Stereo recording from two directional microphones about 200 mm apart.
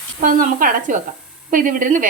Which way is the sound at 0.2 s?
40° right (ahead or behind).